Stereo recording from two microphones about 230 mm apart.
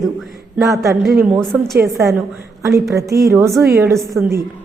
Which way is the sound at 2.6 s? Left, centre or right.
Centre.